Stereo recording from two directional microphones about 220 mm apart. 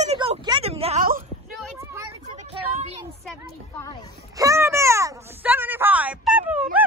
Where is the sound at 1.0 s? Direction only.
40° right (ahead or behind).